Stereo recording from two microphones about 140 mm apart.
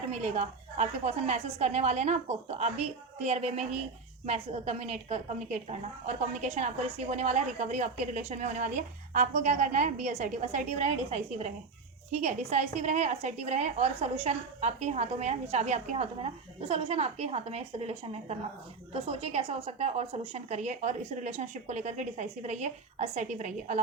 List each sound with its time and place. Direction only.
0.1 s a woman's voice: 50° right (ahead or behind)